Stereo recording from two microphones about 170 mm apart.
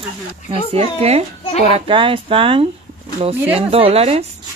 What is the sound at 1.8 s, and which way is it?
Speech, 30° right (ahead or behind).